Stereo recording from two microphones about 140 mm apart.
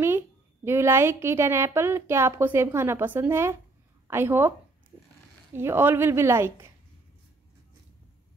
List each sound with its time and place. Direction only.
0.7 s a woman's voice: 20° right (ahead or behind)
5.6 s a woman's voice: 15° right (ahead or behind)